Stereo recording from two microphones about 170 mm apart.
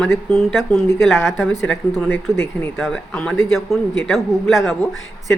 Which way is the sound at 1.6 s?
10° left (ahead or behind).